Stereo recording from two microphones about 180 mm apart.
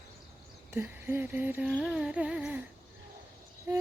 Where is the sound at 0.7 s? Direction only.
15° right (ahead or behind).